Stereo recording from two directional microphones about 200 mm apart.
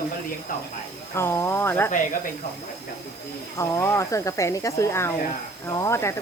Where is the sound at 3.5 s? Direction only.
15° left (ahead or behind).